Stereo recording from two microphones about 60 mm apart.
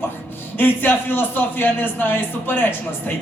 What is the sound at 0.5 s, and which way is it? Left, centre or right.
A man's voice, left.